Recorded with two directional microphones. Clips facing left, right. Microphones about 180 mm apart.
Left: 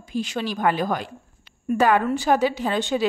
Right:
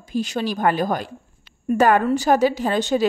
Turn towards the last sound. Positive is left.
turn(degrees=-40)  # may be behind; listen again after turning